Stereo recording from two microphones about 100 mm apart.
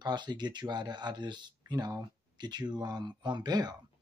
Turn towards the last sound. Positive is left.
turn(degrees=-45)  # may be behind; listen again after turning